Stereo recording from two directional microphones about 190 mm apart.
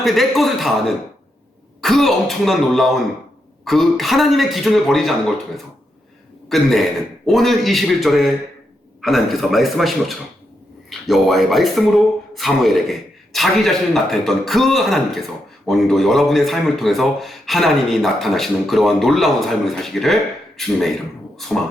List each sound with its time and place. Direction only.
0.0 s a man's voice: centre (ahead or behind)
6.5 s a man's voice: centre (ahead or behind)